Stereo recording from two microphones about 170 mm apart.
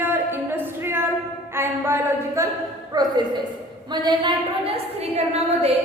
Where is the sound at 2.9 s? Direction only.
25° right (ahead or behind).